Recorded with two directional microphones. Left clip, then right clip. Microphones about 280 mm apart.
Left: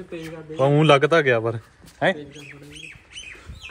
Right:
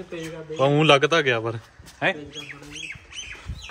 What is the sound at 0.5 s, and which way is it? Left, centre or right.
A man's voice, centre.